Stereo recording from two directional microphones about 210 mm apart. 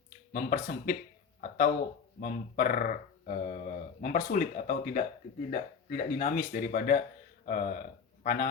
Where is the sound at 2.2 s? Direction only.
45° left (ahead or behind).